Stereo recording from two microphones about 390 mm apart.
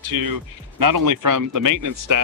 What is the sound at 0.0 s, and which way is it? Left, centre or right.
Speech, right.